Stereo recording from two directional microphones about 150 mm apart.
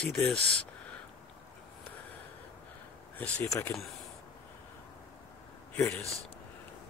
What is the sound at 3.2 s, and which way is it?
Speech, 15° left (ahead or behind).